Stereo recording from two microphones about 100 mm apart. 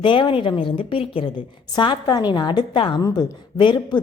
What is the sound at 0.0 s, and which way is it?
A woman's voice, 55° left (ahead or behind).